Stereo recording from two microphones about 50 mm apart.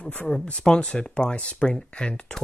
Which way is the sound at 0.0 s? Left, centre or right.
Left.